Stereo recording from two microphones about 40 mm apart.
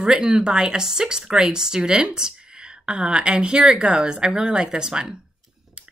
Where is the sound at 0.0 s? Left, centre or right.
Centre.